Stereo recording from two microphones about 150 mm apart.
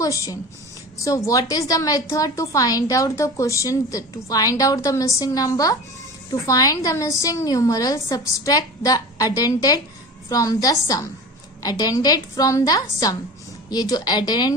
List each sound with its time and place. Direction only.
0.0 s a woman's voice: 25° left (ahead or behind)